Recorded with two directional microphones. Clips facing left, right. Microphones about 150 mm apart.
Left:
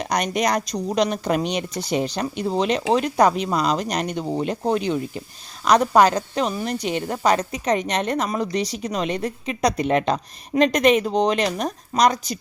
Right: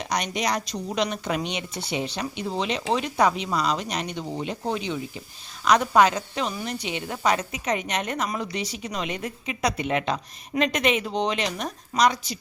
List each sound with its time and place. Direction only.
0.0 s speech: 50° left (ahead or behind)
5.6 s speech: 35° left (ahead or behind)